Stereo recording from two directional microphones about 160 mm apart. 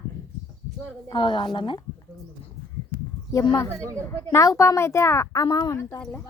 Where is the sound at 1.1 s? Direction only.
30° left (ahead or behind).